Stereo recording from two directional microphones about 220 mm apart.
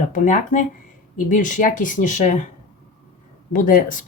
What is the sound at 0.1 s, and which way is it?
Speech, 35° left (ahead or behind).